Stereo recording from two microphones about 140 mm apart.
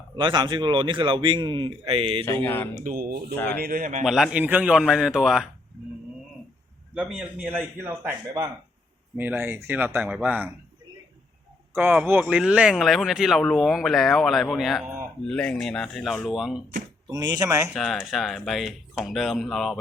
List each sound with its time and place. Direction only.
0.2 s speech: 35° right (ahead or behind)
2.2 s speech: 15° left (ahead or behind)
2.8 s speech: 90° right
3.3 s speech: 15° left (ahead or behind)
3.6 s speech: 90° right
4.0 s speech: centre (ahead or behind)
6.9 s a man's voice: 5° right (ahead or behind)
9.1 s a man's voice: 15° right (ahead or behind)
11.7 s a man's voice: 15° right (ahead or behind)
17.1 s speech: 30° right (ahead or behind)
17.4 s a man's voice: 15° right (ahead or behind)
17.7 s speech: centre (ahead or behind)